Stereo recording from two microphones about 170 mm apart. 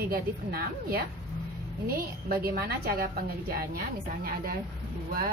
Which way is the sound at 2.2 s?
70° right (ahead or behind).